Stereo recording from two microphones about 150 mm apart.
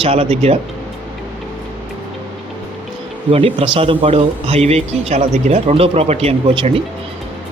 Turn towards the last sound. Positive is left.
turn(degrees=-40)  # may be behind; listen again after turning